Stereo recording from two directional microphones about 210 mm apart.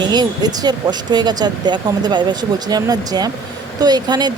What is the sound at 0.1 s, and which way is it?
A woman's voice, 20° right (ahead or behind).